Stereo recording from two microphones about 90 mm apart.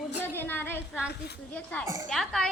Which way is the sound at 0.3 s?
25° left (ahead or behind).